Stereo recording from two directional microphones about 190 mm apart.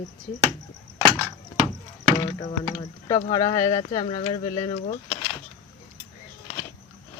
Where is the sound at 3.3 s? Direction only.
20° left (ahead or behind).